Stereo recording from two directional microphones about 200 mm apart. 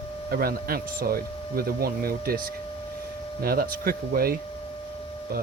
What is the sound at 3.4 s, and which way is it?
Speech, 50° right (ahead or behind).